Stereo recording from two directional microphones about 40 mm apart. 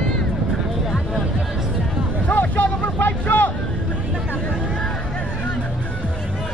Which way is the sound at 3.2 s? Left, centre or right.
Left.